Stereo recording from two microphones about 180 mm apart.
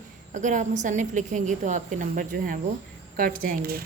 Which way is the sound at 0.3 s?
45° right (ahead or behind).